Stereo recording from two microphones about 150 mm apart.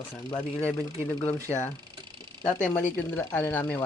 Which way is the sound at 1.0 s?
10° left (ahead or behind).